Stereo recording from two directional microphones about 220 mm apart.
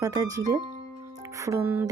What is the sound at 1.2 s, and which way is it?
Music, 15° right (ahead or behind).